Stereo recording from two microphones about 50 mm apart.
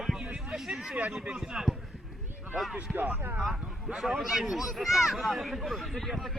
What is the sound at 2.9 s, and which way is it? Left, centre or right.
Speech, right.